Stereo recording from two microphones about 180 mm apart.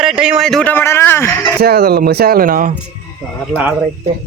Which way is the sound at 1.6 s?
60° right (ahead or behind).